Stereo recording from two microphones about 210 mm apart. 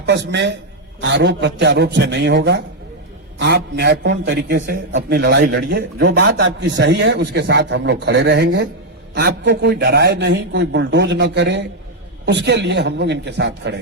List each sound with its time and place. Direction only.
0.0 s a man's voice: 55° right (ahead or behind)